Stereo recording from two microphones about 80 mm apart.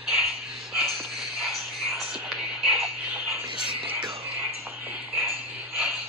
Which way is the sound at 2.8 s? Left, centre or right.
Centre.